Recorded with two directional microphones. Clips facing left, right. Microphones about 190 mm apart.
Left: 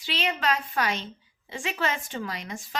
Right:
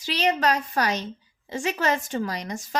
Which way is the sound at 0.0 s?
40° right (ahead or behind).